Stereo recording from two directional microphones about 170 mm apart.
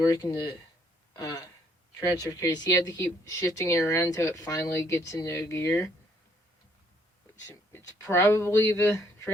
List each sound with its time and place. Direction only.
0.1 s speech: 20° left (ahead or behind)
1.2 s a sound: 20° left (ahead or behind)
2.0 s speech: 20° left (ahead or behind)
7.4 s speech: 15° left (ahead or behind)